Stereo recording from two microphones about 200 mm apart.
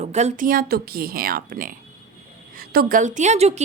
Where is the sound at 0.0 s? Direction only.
35° right (ahead or behind).